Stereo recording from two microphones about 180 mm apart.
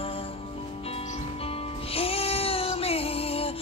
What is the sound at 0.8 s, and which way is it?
Music, 30° left (ahead or behind).